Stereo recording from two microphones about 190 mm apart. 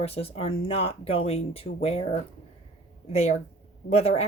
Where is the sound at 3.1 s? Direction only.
35° left (ahead or behind).